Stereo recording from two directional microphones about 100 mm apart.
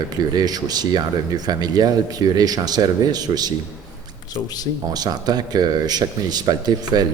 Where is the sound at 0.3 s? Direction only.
40° right (ahead or behind).